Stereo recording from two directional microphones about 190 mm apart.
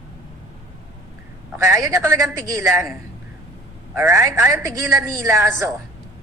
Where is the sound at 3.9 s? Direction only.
15° right (ahead or behind).